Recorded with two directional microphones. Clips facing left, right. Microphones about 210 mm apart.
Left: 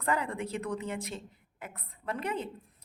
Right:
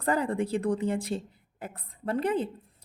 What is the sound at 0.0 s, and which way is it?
A woman's voice, 30° right (ahead or behind).